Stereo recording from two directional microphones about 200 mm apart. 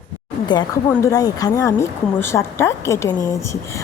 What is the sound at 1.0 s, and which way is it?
Speech, 15° left (ahead or behind).